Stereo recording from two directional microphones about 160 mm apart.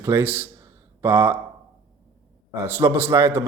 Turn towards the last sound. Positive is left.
turn(degrees=-15)  # may be behind; listen again after turning